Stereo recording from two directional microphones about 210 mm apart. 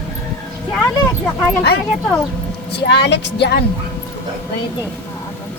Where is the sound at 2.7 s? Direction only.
55° left (ahead or behind).